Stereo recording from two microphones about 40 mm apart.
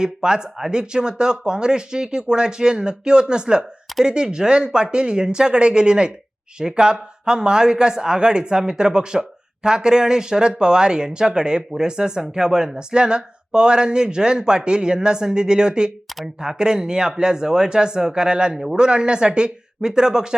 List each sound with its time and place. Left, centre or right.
0.0 s speech: centre